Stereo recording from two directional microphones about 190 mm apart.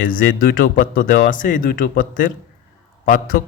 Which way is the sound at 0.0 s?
45° left (ahead or behind).